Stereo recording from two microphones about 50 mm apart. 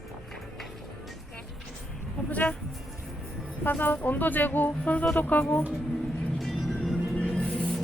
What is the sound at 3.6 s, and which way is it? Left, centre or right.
Speech, left.